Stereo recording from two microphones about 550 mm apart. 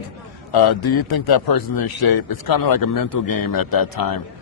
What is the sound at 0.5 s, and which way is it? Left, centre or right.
A man's voice, left.